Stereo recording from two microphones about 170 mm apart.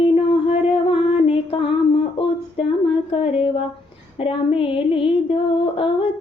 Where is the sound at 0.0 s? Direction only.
35° left (ahead or behind).